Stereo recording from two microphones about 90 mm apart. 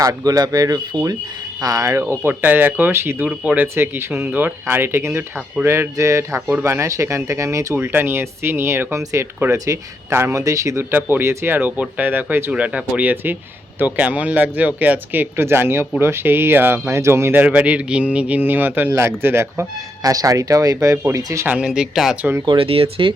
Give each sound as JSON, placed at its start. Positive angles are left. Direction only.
{"t": 0.0, "sound": "speech", "side_deg": -40}
{"t": 3.8, "sound": "speech", "side_deg": -25}
{"t": 7.8, "sound": "speech", "side_deg": -25}
{"t": 10.9, "sound": "speech", "side_deg": -25}
{"t": 17.4, "sound": "speech", "side_deg": -15}
{"t": 20.0, "sound": "speech", "side_deg": -40}
{"t": 21.4, "sound": "speech", "side_deg": -15}
{"t": 22.2, "sound": "speech", "side_deg": -25}
{"t": 22.4, "sound": "speech", "side_deg": -90}